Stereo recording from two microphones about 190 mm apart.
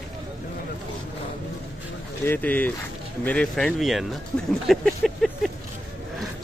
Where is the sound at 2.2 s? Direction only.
10° left (ahead or behind).